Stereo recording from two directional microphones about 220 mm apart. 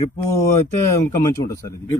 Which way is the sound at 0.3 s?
10° left (ahead or behind).